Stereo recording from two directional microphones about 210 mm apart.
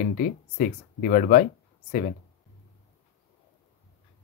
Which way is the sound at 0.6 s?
40° left (ahead or behind).